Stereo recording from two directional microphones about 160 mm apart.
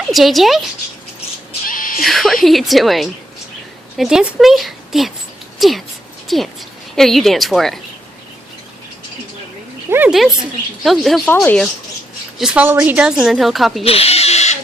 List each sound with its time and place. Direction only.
0.1 s a woman's voice: centre (ahead or behind)
1.6 s music: 60° left (ahead or behind)
2.0 s a woman's voice: centre (ahead or behind)
9.9 s a sound: 10° right (ahead or behind)
10.8 s a woman's voice: centre (ahead or behind)
12.4 s a woman's voice: 5° right (ahead or behind)
13.8 s a sound: 40° left (ahead or behind)